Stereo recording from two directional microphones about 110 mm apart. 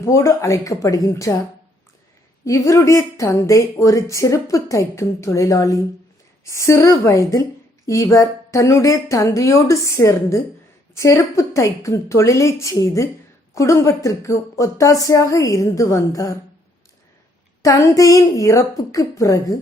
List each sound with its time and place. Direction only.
0.0 s speech: 25° left (ahead or behind)
2.4 s speech: 30° left (ahead or behind)
17.6 s a woman's voice: 30° left (ahead or behind)